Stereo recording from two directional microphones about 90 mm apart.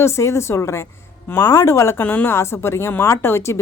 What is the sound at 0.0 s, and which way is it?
A woman's voice, 30° left (ahead or behind).